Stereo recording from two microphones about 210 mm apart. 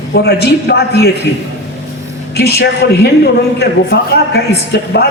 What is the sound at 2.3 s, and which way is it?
A man's voice, 50° left (ahead or behind).